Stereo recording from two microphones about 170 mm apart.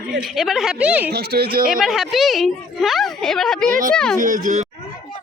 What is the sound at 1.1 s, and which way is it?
Speech, 70° right (ahead or behind).